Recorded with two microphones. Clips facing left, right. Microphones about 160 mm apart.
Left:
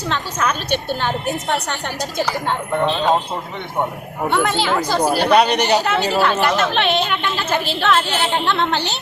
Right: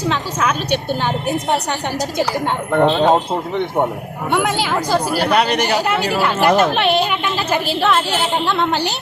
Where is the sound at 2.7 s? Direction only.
65° right (ahead or behind).